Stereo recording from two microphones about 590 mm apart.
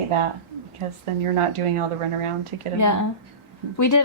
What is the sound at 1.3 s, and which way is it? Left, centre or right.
Speech, right.